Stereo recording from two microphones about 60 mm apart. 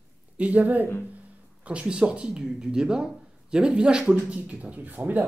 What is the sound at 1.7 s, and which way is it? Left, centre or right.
Speech, centre.